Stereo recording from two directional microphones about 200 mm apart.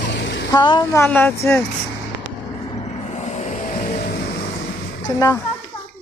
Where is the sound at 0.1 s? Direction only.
65° left (ahead or behind).